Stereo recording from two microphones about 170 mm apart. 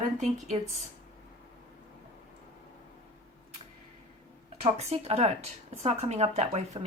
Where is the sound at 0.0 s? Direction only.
45° right (ahead or behind).